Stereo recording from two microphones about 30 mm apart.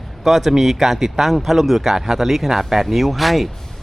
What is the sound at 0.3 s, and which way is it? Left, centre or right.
Speech, centre.